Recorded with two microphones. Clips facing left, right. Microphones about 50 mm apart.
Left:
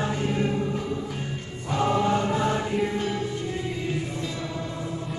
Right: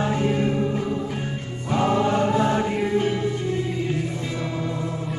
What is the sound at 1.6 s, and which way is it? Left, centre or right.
Music, centre.